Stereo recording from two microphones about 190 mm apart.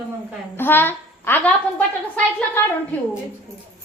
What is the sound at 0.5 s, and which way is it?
A child's voice, 10° left (ahead or behind).